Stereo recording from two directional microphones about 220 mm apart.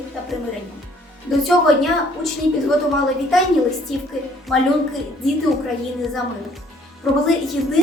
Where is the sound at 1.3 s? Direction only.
Centre (ahead or behind).